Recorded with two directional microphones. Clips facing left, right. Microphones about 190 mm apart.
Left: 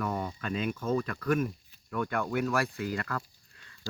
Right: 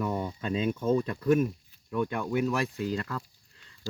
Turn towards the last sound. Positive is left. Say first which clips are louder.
# right 2 dB
turn(degrees=-20)  # may be behind; listen again after turning